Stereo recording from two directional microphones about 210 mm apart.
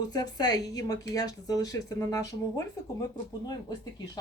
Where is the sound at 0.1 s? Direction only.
20° left (ahead or behind).